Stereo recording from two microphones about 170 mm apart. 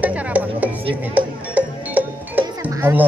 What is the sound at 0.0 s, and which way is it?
Music, 10° right (ahead or behind).